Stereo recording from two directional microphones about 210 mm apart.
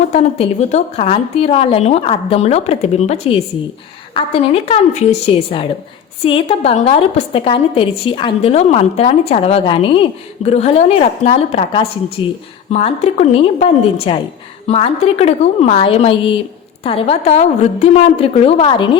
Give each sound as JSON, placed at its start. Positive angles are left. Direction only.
{"t": 0.1, "sound": "a woman's voice", "side_deg": 35}